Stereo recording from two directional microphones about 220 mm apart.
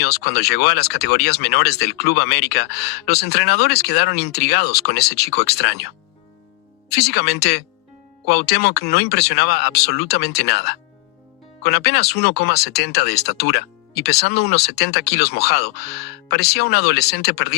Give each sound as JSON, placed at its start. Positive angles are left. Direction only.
{"t": 0.0, "sound": "speech", "side_deg": 50}
{"t": 6.9, "sound": "speech", "side_deg": 50}